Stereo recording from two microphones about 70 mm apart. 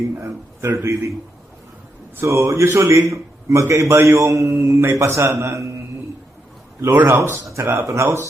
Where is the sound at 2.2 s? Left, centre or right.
Right.